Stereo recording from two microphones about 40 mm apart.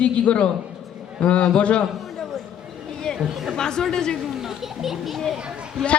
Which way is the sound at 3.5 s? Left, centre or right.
Centre.